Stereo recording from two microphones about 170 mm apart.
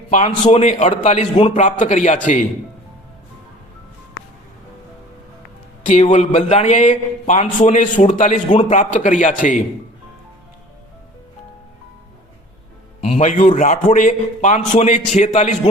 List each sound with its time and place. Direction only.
0.4 s a man's voice: 40° left (ahead or behind)
5.8 s a man's voice: 45° left (ahead or behind)
13.0 s a man's voice: 40° left (ahead or behind)